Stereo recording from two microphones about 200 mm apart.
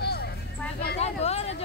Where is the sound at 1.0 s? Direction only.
30° left (ahead or behind).